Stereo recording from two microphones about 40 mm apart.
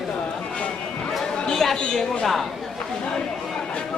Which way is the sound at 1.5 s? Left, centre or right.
Centre.